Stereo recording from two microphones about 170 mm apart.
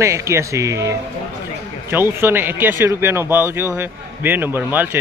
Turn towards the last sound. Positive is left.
turn(degrees=-10)  # may be behind; listen again after turning